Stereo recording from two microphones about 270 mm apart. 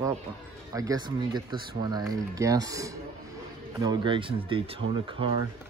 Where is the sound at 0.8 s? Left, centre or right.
Centre.